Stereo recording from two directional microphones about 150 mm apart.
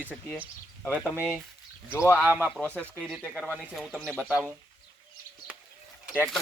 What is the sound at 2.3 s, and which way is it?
Speech, 10° right (ahead or behind).